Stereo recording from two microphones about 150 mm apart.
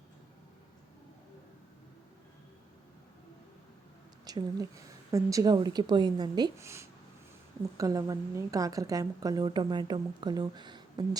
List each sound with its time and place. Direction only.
4.3 s speech: 25° right (ahead or behind)